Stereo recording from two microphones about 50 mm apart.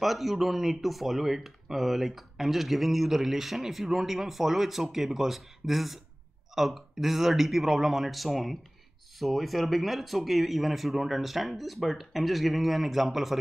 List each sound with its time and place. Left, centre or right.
0.0 s speech: centre